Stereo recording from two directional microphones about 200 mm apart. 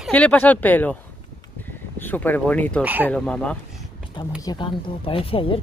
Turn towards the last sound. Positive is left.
turn(degrees=25)  # may be behind; listen again after turning